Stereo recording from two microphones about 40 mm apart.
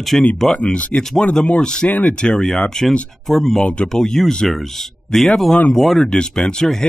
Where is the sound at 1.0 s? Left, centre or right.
Centre.